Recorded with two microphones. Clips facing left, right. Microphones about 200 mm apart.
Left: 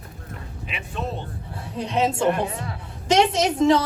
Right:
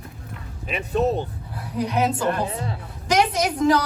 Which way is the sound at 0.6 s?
40° right (ahead or behind).